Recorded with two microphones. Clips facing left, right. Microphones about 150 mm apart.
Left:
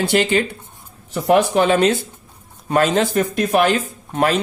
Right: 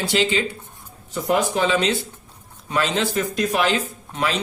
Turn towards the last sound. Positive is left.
turn(degrees=50)  # may be behind; listen again after turning